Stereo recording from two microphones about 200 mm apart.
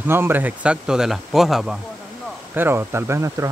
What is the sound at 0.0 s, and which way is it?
Speech, 10° right (ahead or behind).